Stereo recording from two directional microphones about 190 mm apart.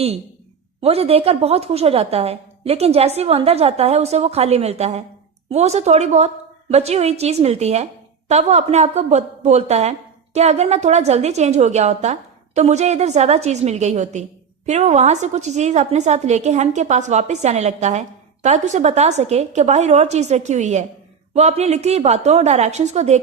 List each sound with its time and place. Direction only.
0.8 s a woman's voice: 30° right (ahead or behind)